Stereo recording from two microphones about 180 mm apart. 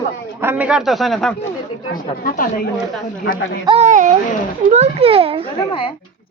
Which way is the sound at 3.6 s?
35° right (ahead or behind).